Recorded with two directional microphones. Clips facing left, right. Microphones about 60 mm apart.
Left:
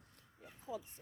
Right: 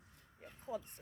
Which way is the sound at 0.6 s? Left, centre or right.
Right.